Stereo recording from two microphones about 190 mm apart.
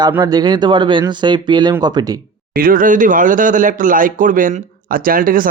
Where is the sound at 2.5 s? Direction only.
50° right (ahead or behind).